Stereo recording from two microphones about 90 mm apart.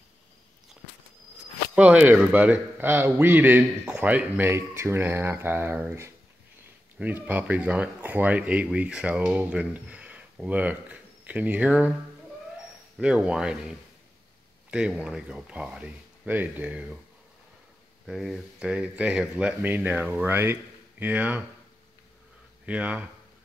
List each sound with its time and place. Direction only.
1.8 s a man's voice: 15° right (ahead or behind)
4.5 s a man's voice: 30° right (ahead or behind)
13.0 s speech: 10° right (ahead or behind)
14.7 s speech: 10° right (ahead or behind)
16.3 s speech: 20° right (ahead or behind)
18.0 s speech: centre (ahead or behind)
18.7 s speech: 15° right (ahead or behind)
22.7 s speech: 15° right (ahead or behind)